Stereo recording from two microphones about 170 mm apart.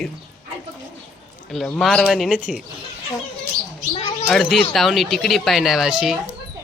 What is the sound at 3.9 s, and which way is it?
Bird, 35° left (ahead or behind).